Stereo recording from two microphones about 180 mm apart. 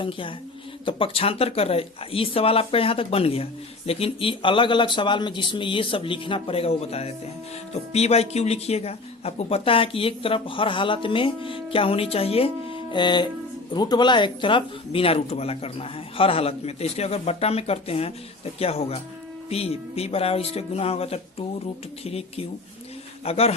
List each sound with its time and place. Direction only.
0.0 s a woman's voice: 30° left (ahead or behind)